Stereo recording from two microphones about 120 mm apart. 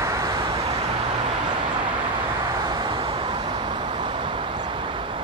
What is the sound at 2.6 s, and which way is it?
Vehicle, 35° right (ahead or behind).